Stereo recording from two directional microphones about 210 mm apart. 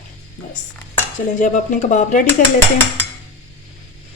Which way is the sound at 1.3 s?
35° left (ahead or behind).